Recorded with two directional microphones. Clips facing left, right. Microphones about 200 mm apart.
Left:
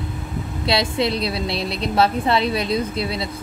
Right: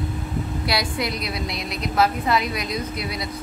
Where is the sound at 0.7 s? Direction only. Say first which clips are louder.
Left 7 dB; 25° left (ahead or behind).